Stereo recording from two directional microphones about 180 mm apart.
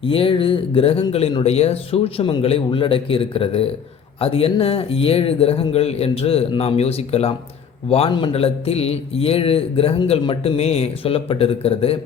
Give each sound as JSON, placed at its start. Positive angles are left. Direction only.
{"t": 0.0, "sound": "a man's voice", "side_deg": 30}